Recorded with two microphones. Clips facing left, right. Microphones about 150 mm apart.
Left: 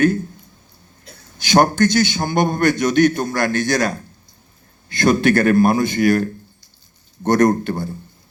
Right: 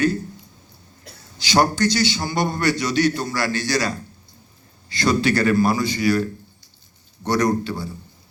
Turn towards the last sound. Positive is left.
turn(degrees=50)  # may be behind; listen again after turning